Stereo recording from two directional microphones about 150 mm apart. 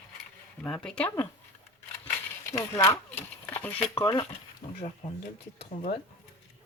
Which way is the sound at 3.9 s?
25° left (ahead or behind).